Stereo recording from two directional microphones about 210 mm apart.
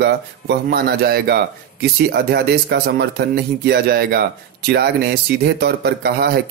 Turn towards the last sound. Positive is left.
turn(degrees=-50)  # may be behind; listen again after turning